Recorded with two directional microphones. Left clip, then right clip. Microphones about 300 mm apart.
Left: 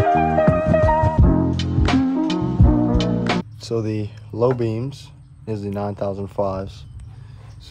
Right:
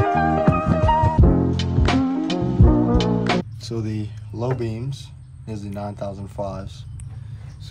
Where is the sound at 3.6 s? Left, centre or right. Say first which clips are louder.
Left 6 dB; centre.